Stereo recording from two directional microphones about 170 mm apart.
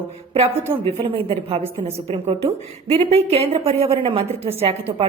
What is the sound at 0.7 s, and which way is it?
A woman's voice, 30° right (ahead or behind).